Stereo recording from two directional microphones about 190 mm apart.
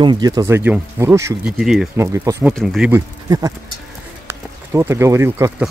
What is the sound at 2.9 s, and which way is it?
Speech, 20° right (ahead or behind).